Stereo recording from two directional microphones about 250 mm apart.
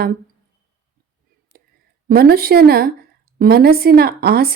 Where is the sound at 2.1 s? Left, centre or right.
Right.